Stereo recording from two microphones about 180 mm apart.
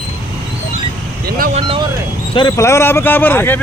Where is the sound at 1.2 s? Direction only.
55° right (ahead or behind).